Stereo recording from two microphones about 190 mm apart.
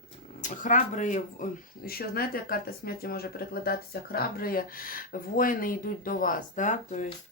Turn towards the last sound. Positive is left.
turn(degrees=40)  # may be behind; listen again after turning